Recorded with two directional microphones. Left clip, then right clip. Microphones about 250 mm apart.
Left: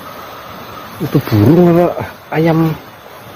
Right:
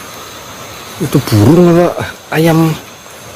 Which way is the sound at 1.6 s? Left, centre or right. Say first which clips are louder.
Right 2 dB; centre.